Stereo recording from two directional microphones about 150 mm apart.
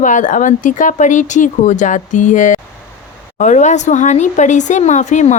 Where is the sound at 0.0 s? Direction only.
55° left (ahead or behind).